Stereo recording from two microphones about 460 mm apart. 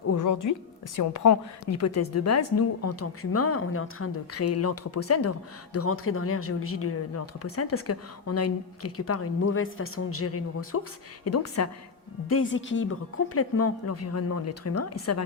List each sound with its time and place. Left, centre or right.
0.1 s a woman's voice: left